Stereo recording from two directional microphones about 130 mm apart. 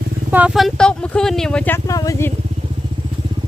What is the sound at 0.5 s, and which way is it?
Speech, 5° left (ahead or behind).